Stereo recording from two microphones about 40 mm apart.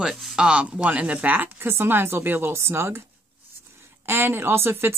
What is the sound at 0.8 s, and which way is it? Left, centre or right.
Speech, right.